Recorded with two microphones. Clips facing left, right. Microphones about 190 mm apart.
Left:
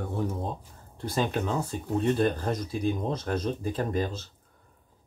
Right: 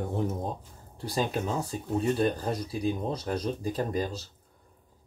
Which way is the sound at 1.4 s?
5° right (ahead or behind).